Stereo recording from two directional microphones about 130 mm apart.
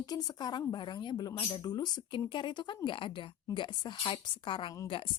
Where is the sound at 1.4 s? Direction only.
45° left (ahead or behind).